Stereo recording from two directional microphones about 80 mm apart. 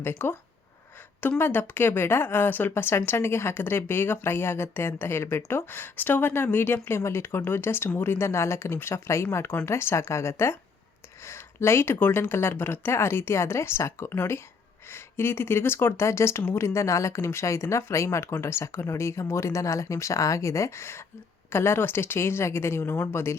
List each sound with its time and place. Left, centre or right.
0.0 s speech: left
1.4 s a woman's voice: left